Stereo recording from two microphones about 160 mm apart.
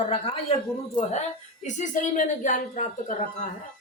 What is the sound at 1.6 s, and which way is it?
Speech, 50° left (ahead or behind).